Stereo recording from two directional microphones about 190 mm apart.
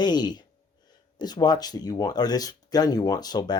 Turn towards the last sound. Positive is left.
turn(degrees=20)  # may be behind; listen again after turning